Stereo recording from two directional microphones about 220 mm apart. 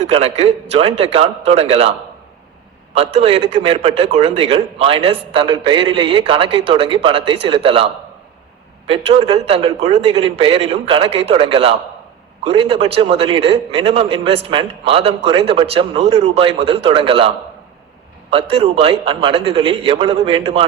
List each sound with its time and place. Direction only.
0.1 s a man's voice: 25° right (ahead or behind)
8.9 s a man's voice: 25° right (ahead or behind)